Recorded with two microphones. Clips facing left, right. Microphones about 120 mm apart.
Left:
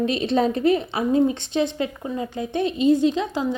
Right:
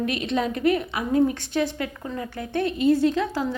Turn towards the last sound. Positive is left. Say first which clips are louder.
# left 1 dB
turn(degrees=20)  # may be behind; listen again after turning